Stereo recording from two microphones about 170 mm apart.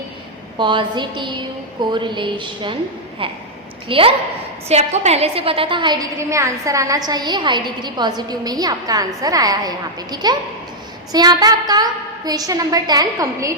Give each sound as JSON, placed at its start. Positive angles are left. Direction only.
{"t": 0.6, "sound": "a woman's voice", "side_deg": -25}
{"t": 3.8, "sound": "a woman's voice", "side_deg": -30}